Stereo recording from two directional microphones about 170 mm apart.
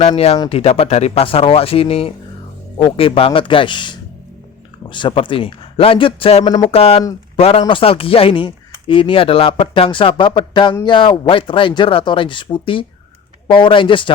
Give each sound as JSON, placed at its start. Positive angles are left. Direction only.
{"t": 0.0, "sound": "speech", "side_deg": 35}
{"t": 6.7, "sound": "speech", "side_deg": 35}